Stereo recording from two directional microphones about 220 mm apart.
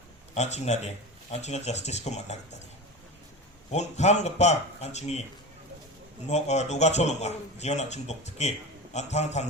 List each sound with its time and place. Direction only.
0.3 s speech: 30° left (ahead or behind)
3.7 s speech: 30° left (ahead or behind)
6.2 s speech: 30° left (ahead or behind)